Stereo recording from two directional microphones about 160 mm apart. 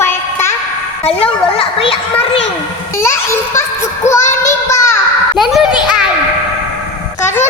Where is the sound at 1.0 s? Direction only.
35° left (ahead or behind).